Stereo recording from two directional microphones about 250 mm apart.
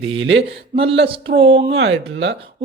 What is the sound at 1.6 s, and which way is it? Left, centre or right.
Speech, right.